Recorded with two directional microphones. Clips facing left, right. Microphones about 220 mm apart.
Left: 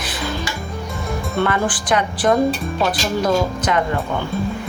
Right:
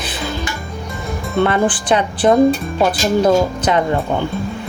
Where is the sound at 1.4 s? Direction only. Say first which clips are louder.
Right 5 dB; 30° right (ahead or behind).